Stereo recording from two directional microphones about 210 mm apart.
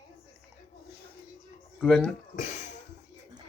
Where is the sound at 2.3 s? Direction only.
35° left (ahead or behind).